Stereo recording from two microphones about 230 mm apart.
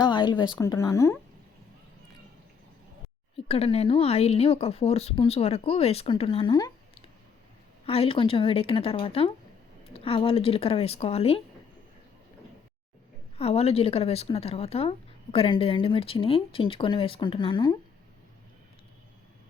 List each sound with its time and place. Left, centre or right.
0.0 s speech: centre
3.3 s a woman's voice: left
7.9 s a woman's voice: left
13.4 s a woman's voice: left